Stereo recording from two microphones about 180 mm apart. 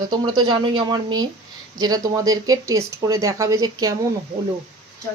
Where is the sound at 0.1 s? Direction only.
25° right (ahead or behind).